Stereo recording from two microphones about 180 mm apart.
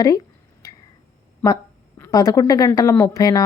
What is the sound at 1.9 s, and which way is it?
A woman's voice, 15° left (ahead or behind).